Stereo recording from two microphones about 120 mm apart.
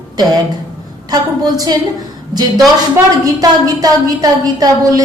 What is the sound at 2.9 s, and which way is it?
A woman's voice, 30° right (ahead or behind).